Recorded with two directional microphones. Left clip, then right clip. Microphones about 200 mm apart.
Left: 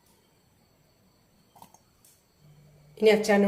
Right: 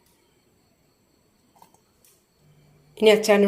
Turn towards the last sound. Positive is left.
turn(degrees=-40)  # may be behind; listen again after turning